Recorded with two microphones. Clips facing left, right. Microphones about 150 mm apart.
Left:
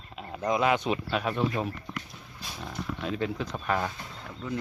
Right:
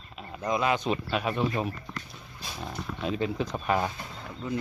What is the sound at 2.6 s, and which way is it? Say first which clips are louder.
Speech: right 1 dB; 20° right (ahead or behind).